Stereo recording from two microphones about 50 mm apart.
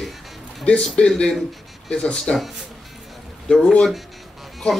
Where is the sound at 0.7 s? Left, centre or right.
Centre.